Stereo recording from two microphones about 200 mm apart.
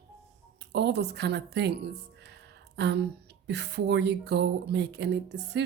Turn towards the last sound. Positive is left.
turn(degrees=-60)  # may be behind; listen again after turning